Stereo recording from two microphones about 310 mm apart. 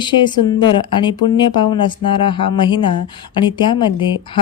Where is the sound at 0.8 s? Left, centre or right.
Centre.